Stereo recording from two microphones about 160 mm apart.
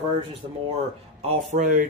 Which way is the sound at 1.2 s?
50° right (ahead or behind).